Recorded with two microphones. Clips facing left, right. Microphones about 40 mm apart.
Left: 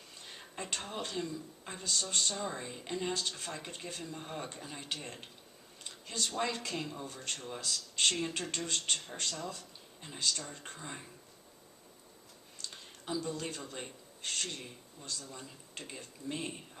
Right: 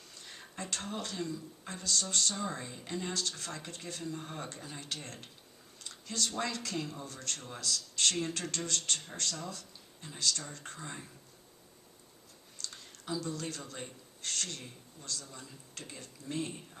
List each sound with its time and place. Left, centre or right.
0.1 s a sound: left
0.5 s speech: left
2.3 s speech: centre
2.8 s speech: left
5.8 s a sound: left
6.4 s speech: left
7.6 s speech: left
12.6 s a sound: left
13.7 s a man's voice: left